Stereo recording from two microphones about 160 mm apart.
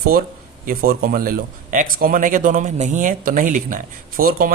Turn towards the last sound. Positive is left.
turn(degrees=-65)  # may be behind; listen again after turning